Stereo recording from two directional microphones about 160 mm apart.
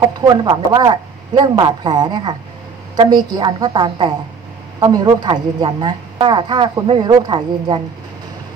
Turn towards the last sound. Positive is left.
turn(degrees=-30)  # may be behind; listen again after turning